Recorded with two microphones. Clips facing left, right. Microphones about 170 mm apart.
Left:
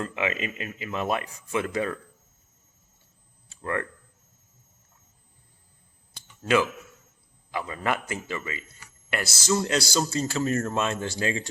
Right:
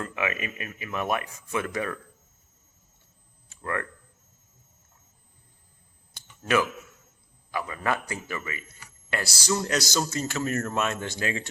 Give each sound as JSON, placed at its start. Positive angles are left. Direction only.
{"t": 0.0, "sound": "speech", "side_deg": 25}
{"t": 3.5, "sound": "a sound", "side_deg": 30}
{"t": 7.5, "sound": "speech", "side_deg": 30}